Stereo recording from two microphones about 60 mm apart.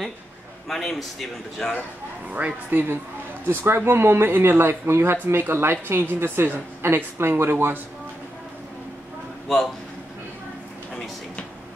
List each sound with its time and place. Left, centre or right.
0.7 s a man's voice: centre
2.2 s speech: right